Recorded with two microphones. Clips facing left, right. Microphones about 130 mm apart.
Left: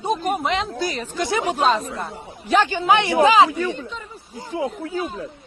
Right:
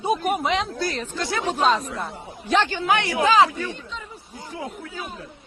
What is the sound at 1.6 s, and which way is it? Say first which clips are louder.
Speech: even; centre (ahead or behind).